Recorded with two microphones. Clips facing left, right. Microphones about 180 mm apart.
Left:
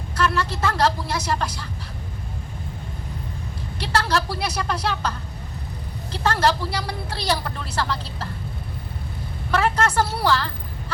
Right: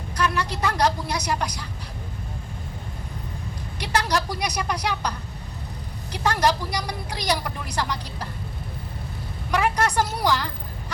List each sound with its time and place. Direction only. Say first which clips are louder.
0.2 s a woman's voice: left 2 dB; 15° right (ahead or behind)
3.8 s a woman's voice: left 1 dB; 15° right (ahead or behind)
9.5 s a woman's voice: left 1 dB; 15° right (ahead or behind)